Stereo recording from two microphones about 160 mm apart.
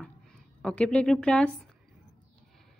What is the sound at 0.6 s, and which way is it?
Speech, 5° left (ahead or behind).